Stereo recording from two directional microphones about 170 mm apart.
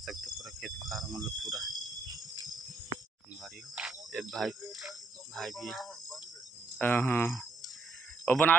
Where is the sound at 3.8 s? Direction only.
Centre (ahead or behind).